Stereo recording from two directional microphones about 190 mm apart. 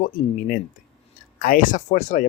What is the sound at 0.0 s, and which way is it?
Speech, 45° left (ahead or behind).